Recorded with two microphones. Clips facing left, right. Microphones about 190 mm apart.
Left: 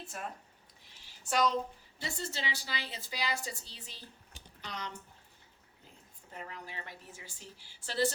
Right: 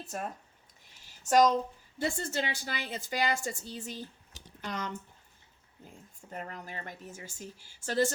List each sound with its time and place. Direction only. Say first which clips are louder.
0.1 s a woman's voice: right 5 dB; 45° right (ahead or behind)
1.0 s a sound: right 7 dB; 45° right (ahead or behind)
2.0 s a woman's voice: right 8 dB; 50° right (ahead or behind)
6.3 s a woman's voice: right 4 dB; 45° right (ahead or behind)